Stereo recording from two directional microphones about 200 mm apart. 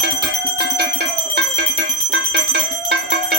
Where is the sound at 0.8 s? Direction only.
55° right (ahead or behind).